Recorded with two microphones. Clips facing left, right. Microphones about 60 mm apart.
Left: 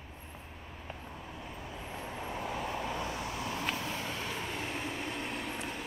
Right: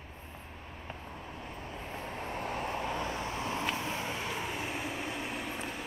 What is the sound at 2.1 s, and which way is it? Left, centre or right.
Vehicle, right.